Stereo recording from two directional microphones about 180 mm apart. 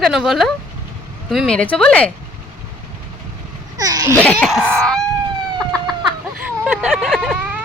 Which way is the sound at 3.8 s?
20° right (ahead or behind).